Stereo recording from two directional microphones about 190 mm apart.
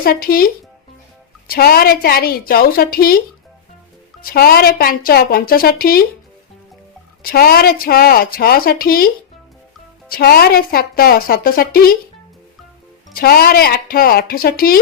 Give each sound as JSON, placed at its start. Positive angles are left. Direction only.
{"t": 0.0, "sound": "a woman's voice", "side_deg": 50}
{"t": 4.2, "sound": "a woman's voice", "side_deg": 50}
{"t": 7.2, "sound": "a woman's voice", "side_deg": 50}
{"t": 10.1, "sound": "a woman's voice", "side_deg": 55}
{"t": 13.1, "sound": "a woman's voice", "side_deg": 55}